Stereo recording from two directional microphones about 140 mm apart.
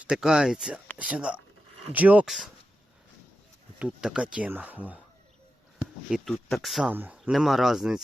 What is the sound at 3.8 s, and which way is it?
Speech, 5° right (ahead or behind).